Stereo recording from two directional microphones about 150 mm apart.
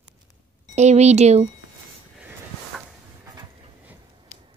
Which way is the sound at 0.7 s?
45° right (ahead or behind).